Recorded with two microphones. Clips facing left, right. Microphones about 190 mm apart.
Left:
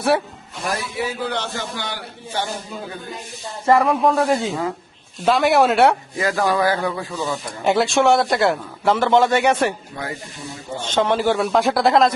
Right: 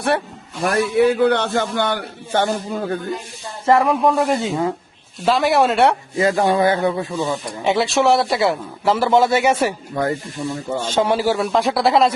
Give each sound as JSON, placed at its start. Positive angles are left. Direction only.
{"t": 0.6, "sound": "a man's voice", "side_deg": -60}
{"t": 3.8, "sound": "a man's voice", "side_deg": 0}
{"t": 6.1, "sound": "speech", "side_deg": -25}
{"t": 7.4, "sound": "a man's voice", "side_deg": 0}
{"t": 10.8, "sound": "a man's voice", "side_deg": -10}